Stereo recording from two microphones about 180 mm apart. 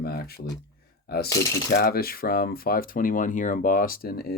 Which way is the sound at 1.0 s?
60° left (ahead or behind).